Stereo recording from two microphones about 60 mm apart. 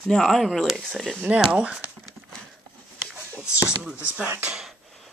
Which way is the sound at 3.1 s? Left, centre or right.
Centre.